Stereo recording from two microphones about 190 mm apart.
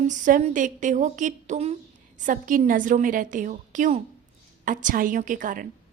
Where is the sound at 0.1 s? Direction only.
40° right (ahead or behind).